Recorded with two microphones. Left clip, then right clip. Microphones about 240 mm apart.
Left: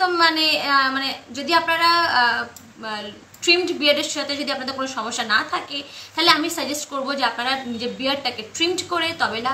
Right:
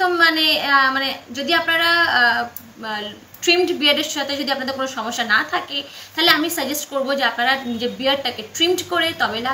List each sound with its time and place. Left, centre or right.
0.0 s a woman's voice: centre